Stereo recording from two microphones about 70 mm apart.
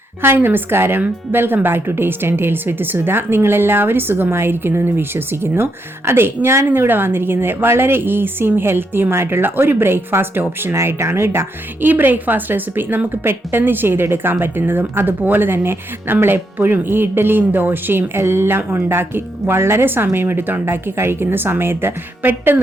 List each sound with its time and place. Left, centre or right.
0.2 s speech: right